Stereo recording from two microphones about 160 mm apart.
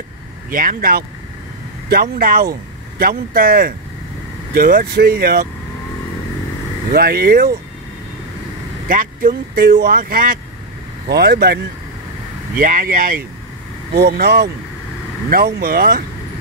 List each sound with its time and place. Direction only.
0.5 s speech: 60° right (ahead or behind); by 5.5 s 75° right (ahead or behind)
6.9 s speech: 75° right (ahead or behind)
8.8 s speech: 60° right (ahead or behind)
11.1 s speech: 90° right
12.5 s speech: 60° right (ahead or behind)
13.9 s speech: 90° right
15.2 s speech: 75° right (ahead or behind)